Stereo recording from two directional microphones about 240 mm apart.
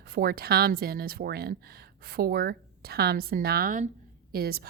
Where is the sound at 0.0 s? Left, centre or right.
Right.